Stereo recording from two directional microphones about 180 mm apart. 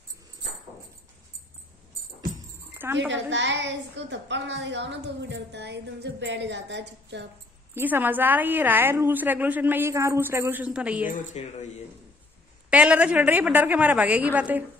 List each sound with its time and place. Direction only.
2.8 s a woman's voice: 10° right (ahead or behind)
3.1 s a woman's voice: 85° right
7.7 s a woman's voice: 10° right (ahead or behind)
11.1 s speech: 40° left (ahead or behind)
12.6 s a woman's voice: 5° right (ahead or behind)